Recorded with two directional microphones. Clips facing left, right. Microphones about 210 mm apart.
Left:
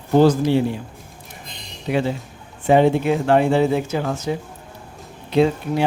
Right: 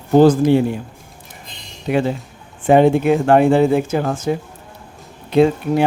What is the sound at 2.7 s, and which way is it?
Speech, 50° right (ahead or behind).